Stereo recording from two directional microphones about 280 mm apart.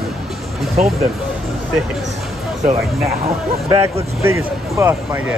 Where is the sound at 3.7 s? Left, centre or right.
Centre.